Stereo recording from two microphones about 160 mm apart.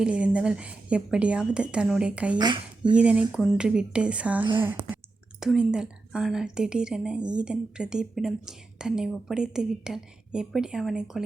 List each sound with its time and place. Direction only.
0.0 s a woman's voice: 5° right (ahead or behind)
2.4 s speech: 30° right (ahead or behind)
2.9 s a woman's voice: 5° right (ahead or behind)